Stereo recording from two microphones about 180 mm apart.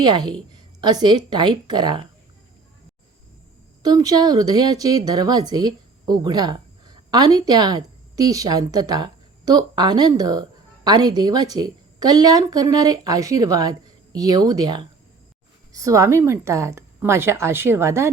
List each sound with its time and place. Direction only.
0.0 s a woman's voice: 25° right (ahead or behind)
3.8 s a woman's voice: 20° right (ahead or behind)